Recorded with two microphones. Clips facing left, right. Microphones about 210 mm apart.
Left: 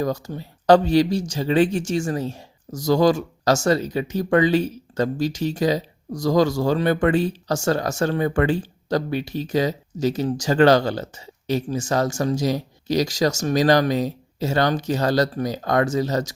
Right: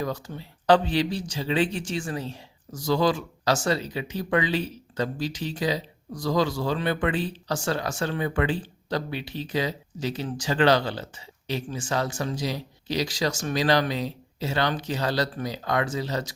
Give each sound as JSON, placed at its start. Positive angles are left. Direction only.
{"t": 0.0, "sound": "speech", "side_deg": 40}